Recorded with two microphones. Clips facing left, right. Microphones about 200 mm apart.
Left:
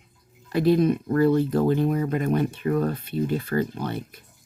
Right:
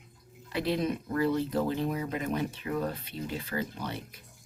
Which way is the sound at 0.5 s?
50° left (ahead or behind).